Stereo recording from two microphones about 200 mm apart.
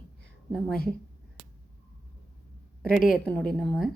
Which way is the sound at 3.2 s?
5° left (ahead or behind).